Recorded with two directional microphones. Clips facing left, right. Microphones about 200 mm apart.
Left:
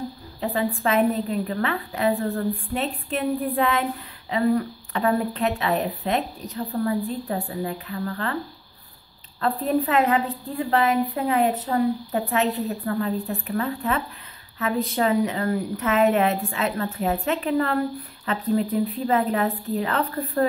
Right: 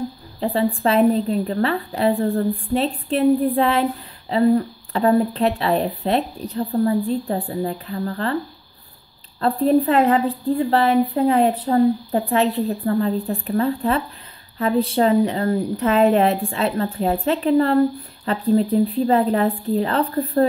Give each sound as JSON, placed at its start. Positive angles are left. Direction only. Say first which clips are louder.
{"t": 0.4, "sound": "a woman's voice", "louder": "right 5 dB", "side_deg": -30}
{"t": 9.4, "sound": "a woman's voice", "louder": "right 6 dB", "side_deg": -30}